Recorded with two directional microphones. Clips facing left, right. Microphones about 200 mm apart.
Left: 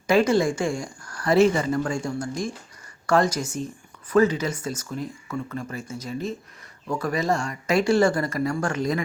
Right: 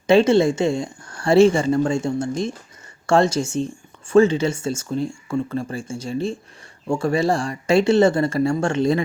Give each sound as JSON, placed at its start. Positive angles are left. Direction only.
{"t": 0.1, "sound": "speech", "side_deg": -25}